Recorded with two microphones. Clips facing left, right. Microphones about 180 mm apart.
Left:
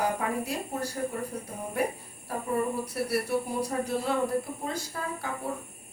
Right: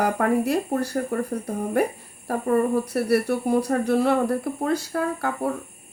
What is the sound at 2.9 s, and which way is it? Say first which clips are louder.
A woman's voice: right 5 dB; 65° right (ahead or behind).